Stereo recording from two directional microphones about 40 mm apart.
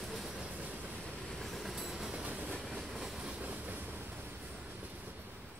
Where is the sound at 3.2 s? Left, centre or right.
Right.